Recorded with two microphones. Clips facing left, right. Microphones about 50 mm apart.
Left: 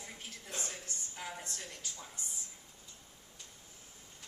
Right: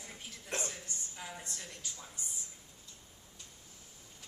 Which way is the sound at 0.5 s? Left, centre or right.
Right.